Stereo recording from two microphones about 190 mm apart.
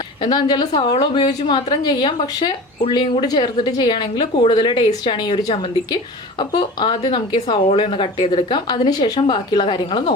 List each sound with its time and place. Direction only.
0.2 s a woman's voice: 25° left (ahead or behind)